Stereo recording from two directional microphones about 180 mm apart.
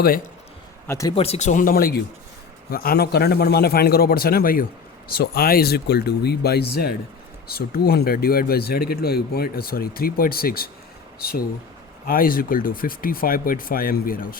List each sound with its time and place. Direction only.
0.9 s speech: 15° left (ahead or behind)
1.1 s speech: 35° left (ahead or behind); by 14.3 s 55° left (ahead or behind)